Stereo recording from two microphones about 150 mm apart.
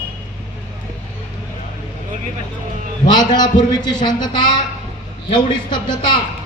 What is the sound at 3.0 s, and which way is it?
A man's voice, 30° left (ahead or behind).